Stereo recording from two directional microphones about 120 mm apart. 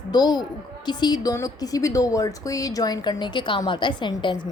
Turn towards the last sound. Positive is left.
turn(degrees=40)  # may be behind; listen again after turning